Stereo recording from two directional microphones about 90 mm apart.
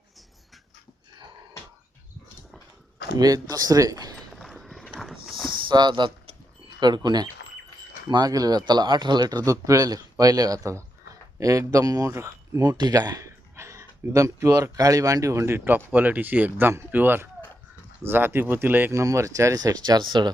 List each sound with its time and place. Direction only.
3.2 s speech: 45° right (ahead or behind)
4.1 s a sound: 5° left (ahead or behind)
5.5 s a sound: 55° right (ahead or behind)
6.7 s speech: 55° right (ahead or behind)
9.4 s a man's voice: 35° right (ahead or behind)
12.7 s speech: 50° right (ahead or behind); by 18.9 s 20° right (ahead or behind)
18.9 s speech: 35° right (ahead or behind); by 20.3 s 55° right (ahead or behind)